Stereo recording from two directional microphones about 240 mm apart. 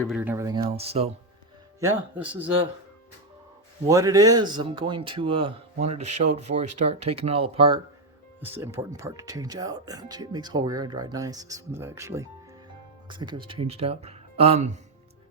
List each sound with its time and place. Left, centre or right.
0.2 s speech: centre; by 1.1 s right
1.8 s speech: centre
3.8 s speech: centre
8.4 s speech: centre; by 14.8 s right